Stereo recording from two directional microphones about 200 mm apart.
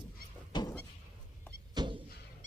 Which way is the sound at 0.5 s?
20° left (ahead or behind).